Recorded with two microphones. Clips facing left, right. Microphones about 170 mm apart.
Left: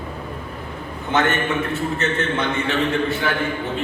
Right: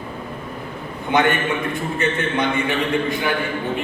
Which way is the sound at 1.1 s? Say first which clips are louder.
Right 1 dB; 15° right (ahead or behind).